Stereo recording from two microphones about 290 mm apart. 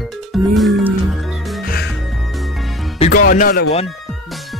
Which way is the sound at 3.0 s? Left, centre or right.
Left.